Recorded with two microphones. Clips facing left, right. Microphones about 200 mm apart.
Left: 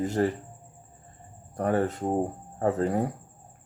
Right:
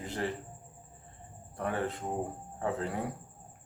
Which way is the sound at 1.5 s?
40° left (ahead or behind).